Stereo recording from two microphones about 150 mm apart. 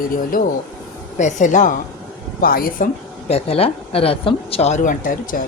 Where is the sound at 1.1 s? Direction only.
55° left (ahead or behind).